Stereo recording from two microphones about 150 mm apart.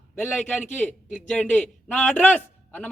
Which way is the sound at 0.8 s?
10° left (ahead or behind).